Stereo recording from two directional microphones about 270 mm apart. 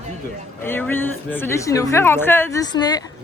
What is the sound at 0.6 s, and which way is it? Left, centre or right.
A woman's voice, centre.